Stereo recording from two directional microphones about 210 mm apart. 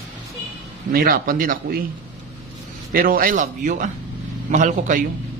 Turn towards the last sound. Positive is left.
turn(degrees=-40)  # may be behind; listen again after turning